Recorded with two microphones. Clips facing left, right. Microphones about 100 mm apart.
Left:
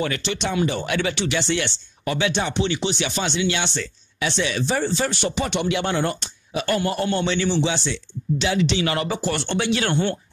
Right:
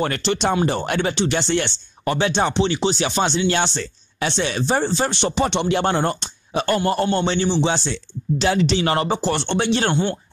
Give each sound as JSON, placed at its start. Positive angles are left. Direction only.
{"t": 0.0, "sound": "speech", "side_deg": -40}